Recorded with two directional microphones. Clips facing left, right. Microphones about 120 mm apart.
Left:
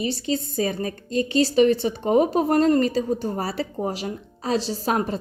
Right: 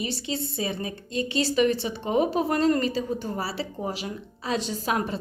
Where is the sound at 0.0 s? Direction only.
40° left (ahead or behind).